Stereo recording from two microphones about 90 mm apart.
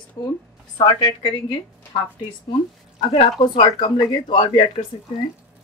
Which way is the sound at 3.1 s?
70° left (ahead or behind).